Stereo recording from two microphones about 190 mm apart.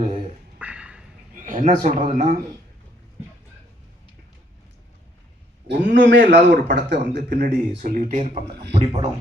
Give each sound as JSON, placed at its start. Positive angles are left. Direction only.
{"t": 0.6, "sound": "a sound", "side_deg": -5}
{"t": 1.4, "sound": "speech", "side_deg": -40}
{"t": 5.6, "sound": "a man's voice", "side_deg": -65}
{"t": 8.7, "sound": "speech", "side_deg": -30}